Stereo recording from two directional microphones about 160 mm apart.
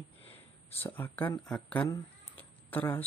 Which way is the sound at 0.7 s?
15° left (ahead or behind).